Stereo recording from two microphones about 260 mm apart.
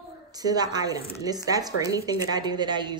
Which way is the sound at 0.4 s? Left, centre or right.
Centre.